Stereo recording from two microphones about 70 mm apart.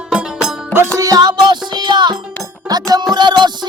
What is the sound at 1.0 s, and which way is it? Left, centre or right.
Music, right.